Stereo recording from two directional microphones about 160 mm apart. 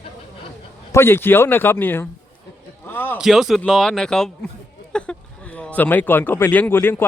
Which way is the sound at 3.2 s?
Centre (ahead or behind).